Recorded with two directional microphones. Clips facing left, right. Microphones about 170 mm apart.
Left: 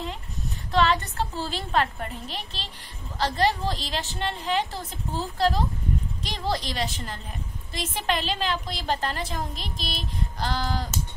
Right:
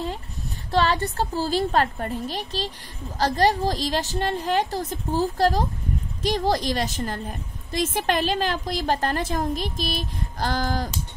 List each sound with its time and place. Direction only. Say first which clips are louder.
0.7 s a woman's voice: right 1 dB; 35° right (ahead or behind)